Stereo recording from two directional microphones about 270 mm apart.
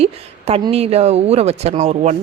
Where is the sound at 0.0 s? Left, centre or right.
Right.